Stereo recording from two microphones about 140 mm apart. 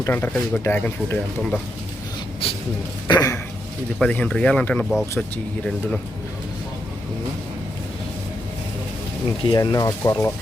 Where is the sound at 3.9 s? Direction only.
10° left (ahead or behind).